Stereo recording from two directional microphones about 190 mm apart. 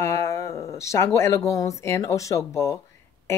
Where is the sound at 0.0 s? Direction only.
15° left (ahead or behind).